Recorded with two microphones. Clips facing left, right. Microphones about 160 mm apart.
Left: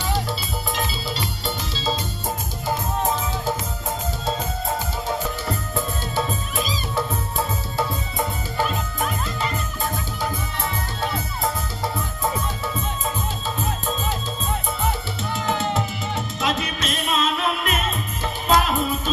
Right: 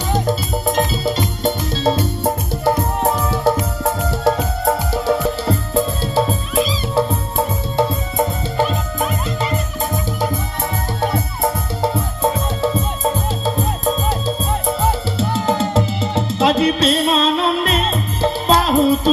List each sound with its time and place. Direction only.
0.3 s music: 45° right (ahead or behind); by 5.1 s 70° right (ahead or behind)
5.5 s music: 30° right (ahead or behind)
11.8 s music: 30° right (ahead or behind)